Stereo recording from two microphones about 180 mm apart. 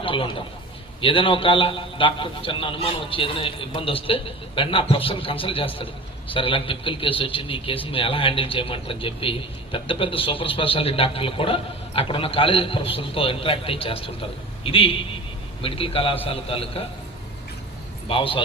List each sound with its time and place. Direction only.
0.0 s a man's voice: 30° left (ahead or behind)
18.1 s a man's voice: 30° left (ahead or behind)